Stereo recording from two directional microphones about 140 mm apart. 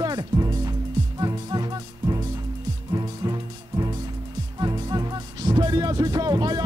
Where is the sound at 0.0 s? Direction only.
30° right (ahead or behind).